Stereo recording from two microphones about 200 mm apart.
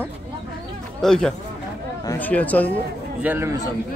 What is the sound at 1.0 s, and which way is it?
A man's voice, centre (ahead or behind).